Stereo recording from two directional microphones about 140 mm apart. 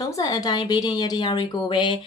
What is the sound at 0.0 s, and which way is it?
Speech, 25° left (ahead or behind).